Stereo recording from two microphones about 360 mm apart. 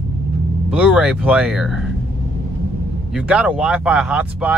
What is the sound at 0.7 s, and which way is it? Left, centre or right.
Speech, centre.